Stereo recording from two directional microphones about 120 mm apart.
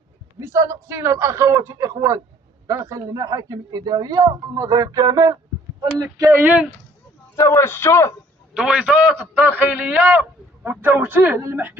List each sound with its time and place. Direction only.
0.4 s speech: 25° right (ahead or behind)
6.4 s a man's voice: 10° right (ahead or behind)
7.3 s speech: 25° left (ahead or behind)
8.5 s a man's voice: 10° right (ahead or behind)